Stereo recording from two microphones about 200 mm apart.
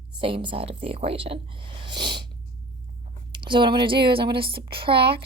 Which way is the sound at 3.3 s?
25° right (ahead or behind).